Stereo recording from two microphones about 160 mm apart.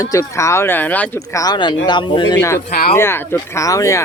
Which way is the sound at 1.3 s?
25° left (ahead or behind).